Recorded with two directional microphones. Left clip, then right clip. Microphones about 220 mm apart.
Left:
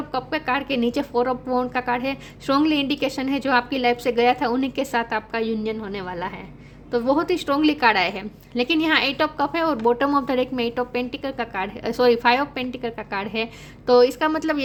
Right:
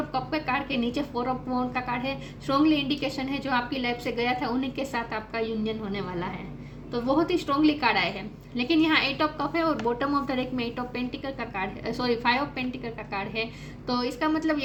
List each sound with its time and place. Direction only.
0.1 s a woman's voice: 50° left (ahead or behind)